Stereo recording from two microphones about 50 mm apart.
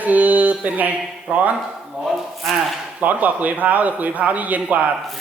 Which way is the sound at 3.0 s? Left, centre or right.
Right.